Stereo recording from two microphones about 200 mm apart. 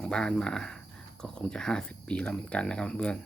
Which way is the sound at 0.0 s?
5° left (ahead or behind).